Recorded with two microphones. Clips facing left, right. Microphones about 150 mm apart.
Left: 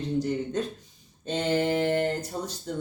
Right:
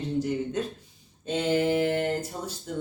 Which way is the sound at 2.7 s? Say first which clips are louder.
Even; 5° right (ahead or behind).